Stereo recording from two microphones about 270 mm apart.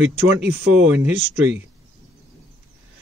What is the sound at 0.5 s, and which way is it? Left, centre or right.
Speech, centre.